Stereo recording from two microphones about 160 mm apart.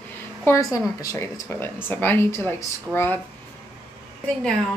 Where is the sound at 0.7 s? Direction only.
20° left (ahead or behind).